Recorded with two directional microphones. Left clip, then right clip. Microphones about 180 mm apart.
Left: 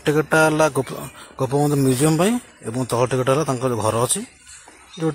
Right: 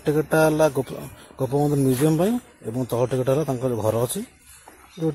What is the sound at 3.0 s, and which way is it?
Speech, centre (ahead or behind).